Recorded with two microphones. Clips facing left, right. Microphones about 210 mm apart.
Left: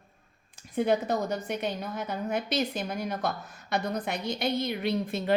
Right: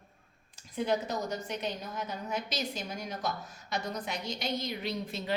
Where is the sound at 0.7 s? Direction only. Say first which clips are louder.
Left 5 dB; 55° left (ahead or behind).